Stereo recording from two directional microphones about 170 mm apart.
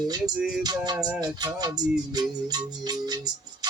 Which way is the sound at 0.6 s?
20° right (ahead or behind).